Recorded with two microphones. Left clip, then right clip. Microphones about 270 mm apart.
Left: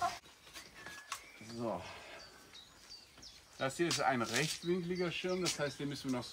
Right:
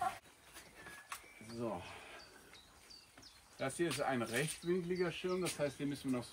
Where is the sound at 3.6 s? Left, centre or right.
Centre.